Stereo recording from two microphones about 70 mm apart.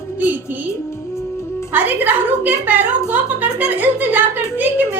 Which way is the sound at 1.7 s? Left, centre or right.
Right.